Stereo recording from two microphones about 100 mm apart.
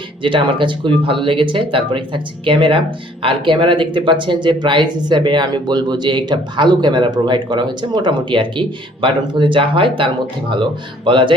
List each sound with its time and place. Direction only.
0.2 s speech: 55° right (ahead or behind)